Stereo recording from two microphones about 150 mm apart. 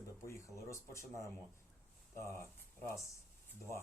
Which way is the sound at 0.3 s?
20° left (ahead or behind).